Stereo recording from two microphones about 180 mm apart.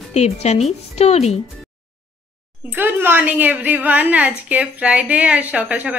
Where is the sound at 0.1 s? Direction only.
35° left (ahead or behind).